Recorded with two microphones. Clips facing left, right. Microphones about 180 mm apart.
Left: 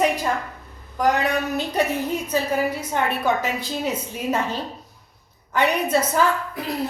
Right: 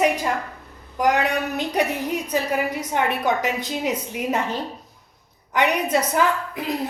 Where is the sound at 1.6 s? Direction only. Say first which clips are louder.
Even; 15° right (ahead or behind).